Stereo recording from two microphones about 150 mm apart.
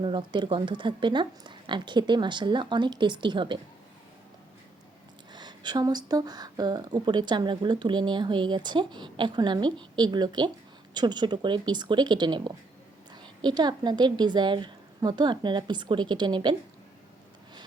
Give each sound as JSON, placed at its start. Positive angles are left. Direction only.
{"t": 0.0, "sound": "speech", "side_deg": -30}
{"t": 5.3, "sound": "speech", "side_deg": -30}